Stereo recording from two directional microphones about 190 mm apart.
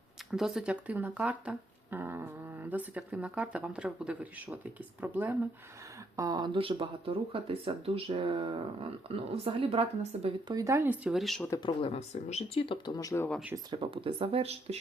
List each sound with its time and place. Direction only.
0.3 s speech: centre (ahead or behind)
6.1 s speech: 20° right (ahead or behind)
10.5 s speech: 15° right (ahead or behind); by 11.4 s centre (ahead or behind)
11.5 s speech: 25° left (ahead or behind)
13.7 s speech: 30° right (ahead or behind)